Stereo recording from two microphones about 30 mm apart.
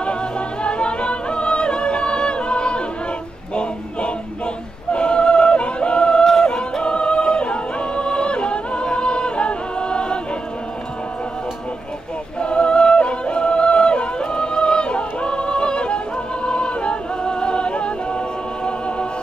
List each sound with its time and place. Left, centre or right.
0.0 s music: left
4.9 s singing: left
6.4 s yodeling: left
12.4 s yodeling: left
16.4 s music: left